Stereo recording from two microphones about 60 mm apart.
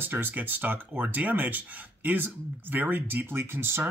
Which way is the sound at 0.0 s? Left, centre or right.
Right.